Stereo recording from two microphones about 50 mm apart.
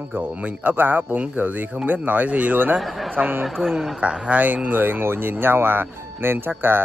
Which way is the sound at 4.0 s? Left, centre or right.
Right.